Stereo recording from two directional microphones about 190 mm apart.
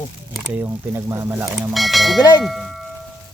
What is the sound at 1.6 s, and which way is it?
Speech, centre (ahead or behind).